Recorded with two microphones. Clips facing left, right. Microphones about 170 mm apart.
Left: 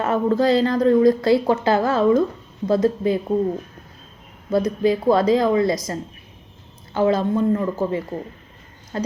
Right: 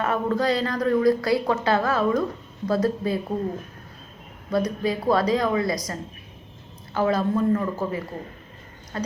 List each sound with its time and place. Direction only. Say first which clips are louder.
0.0 s a woman's voice: left 5 dB; 25° left (ahead or behind)
4.5 s a woman's voice: left 5 dB; 25° left (ahead or behind)